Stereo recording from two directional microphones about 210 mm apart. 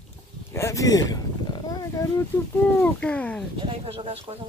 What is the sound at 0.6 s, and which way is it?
Speech, 15° left (ahead or behind).